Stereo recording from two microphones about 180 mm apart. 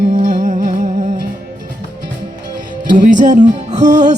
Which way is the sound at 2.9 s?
45° right (ahead or behind).